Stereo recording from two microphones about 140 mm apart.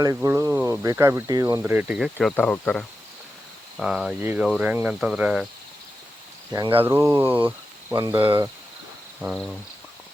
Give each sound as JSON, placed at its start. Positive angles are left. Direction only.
{"t": 0.0, "sound": "speech", "side_deg": -20}
{"t": 1.6, "sound": "speech", "side_deg": -10}
{"t": 2.1, "sound": "speech", "side_deg": 10}
{"t": 3.8, "sound": "speech", "side_deg": -5}
{"t": 4.2, "sound": "speech", "side_deg": -15}
{"t": 6.8, "sound": "speech", "side_deg": -20}
{"t": 7.9, "sound": "speech", "side_deg": -35}
{"t": 9.2, "sound": "speech", "side_deg": -5}